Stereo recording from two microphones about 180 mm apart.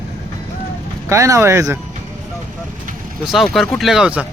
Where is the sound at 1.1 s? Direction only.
15° right (ahead or behind).